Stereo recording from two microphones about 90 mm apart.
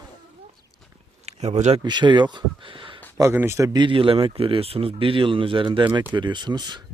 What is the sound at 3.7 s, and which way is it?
Speech, 65° right (ahead or behind).